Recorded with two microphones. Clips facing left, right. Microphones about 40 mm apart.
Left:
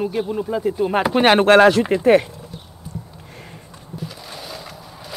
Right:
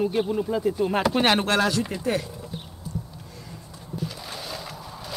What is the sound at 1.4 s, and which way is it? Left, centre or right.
Speech, left.